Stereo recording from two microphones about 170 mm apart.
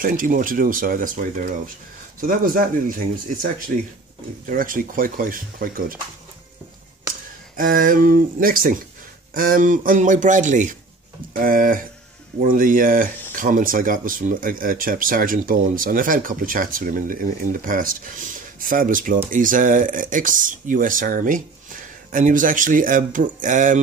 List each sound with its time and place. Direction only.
0.0 s speech: 55° right (ahead or behind)
7.5 s speech: 55° right (ahead or behind)